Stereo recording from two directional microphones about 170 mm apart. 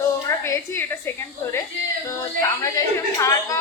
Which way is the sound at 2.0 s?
15° left (ahead or behind).